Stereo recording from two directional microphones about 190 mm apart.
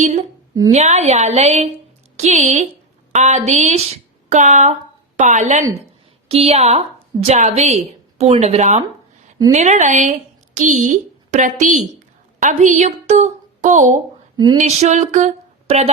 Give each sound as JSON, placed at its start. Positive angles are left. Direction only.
{"t": 0.0, "sound": "a woman's voice", "side_deg": -40}
{"t": 14.3, "sound": "speech", "side_deg": -20}
{"t": 14.6, "sound": "speech", "side_deg": -40}